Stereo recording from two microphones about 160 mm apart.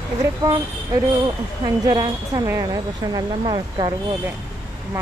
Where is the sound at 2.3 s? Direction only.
20° right (ahead or behind).